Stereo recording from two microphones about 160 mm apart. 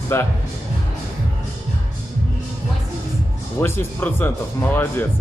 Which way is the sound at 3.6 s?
15° left (ahead or behind).